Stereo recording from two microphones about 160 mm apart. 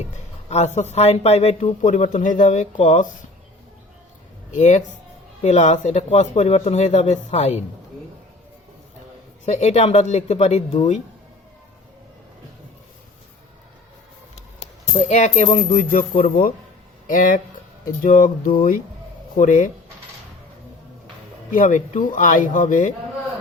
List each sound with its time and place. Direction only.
0.4 s speech: 45° left (ahead or behind)
4.5 s speech: 50° left (ahead or behind)
9.5 s speech: 45° left (ahead or behind)
14.3 s speech: 45° left (ahead or behind)
21.5 s speech: 55° left (ahead or behind)